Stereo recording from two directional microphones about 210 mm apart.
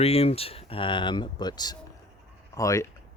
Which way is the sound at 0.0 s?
30° left (ahead or behind).